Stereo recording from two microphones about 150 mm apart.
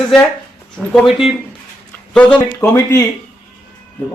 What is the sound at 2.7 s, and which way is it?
Speech, 15° left (ahead or behind).